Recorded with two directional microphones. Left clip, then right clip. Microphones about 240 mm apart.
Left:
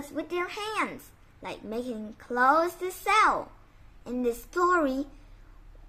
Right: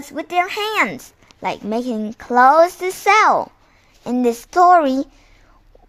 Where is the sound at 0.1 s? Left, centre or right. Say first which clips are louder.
Right 13 dB; right.